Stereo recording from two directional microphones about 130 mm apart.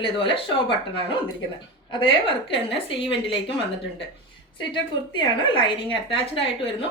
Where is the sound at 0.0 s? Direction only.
40° left (ahead or behind).